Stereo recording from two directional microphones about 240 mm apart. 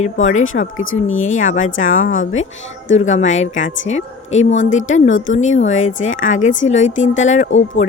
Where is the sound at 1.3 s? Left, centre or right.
Left.